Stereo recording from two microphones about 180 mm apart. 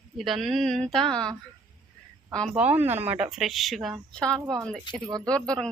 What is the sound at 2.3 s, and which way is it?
Speech, 5° left (ahead or behind).